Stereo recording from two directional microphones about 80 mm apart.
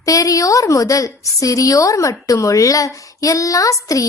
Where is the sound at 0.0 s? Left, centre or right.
Left.